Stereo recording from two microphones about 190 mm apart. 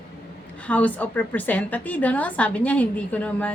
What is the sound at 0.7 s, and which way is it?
A woman's voice, 10° left (ahead or behind).